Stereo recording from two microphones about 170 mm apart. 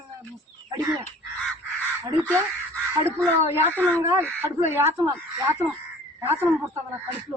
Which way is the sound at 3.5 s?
10° right (ahead or behind).